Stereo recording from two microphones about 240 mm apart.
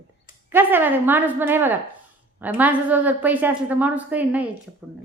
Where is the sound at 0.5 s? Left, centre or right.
Centre.